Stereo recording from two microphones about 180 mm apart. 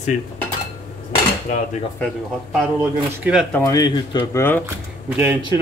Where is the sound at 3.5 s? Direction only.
15° left (ahead or behind).